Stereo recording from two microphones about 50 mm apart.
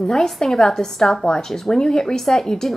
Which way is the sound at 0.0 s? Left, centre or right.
Centre.